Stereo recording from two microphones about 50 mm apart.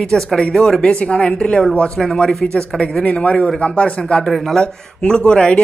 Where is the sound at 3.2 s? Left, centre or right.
Left.